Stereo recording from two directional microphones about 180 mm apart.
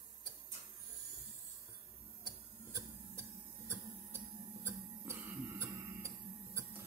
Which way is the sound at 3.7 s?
15° right (ahead or behind).